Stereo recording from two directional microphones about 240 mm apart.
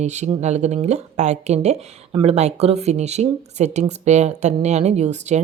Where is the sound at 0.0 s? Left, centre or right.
Right.